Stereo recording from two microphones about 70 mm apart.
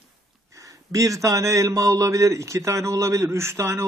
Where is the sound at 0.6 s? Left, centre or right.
Right.